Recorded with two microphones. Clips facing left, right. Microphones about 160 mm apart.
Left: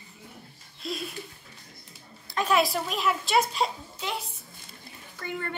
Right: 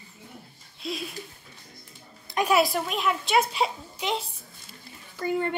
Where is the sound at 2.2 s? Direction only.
15° right (ahead or behind).